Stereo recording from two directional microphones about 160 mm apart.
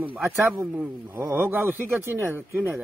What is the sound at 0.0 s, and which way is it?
Speech, 15° right (ahead or behind).